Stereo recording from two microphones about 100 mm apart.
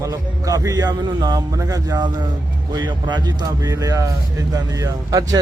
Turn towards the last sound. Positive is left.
turn(degrees=-35)  # may be behind; listen again after turning